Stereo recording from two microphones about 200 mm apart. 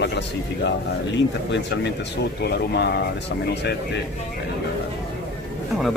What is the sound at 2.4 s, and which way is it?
Speech, 55° left (ahead or behind).